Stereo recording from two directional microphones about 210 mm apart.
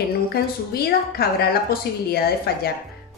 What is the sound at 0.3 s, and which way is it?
A woman's voice, 50° left (ahead or behind).